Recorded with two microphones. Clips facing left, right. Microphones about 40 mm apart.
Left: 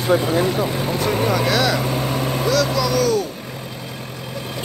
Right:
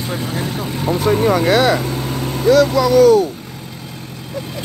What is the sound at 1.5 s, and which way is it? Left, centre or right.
Speech, right.